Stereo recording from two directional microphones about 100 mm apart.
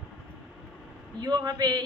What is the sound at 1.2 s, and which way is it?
Speech, 40° right (ahead or behind).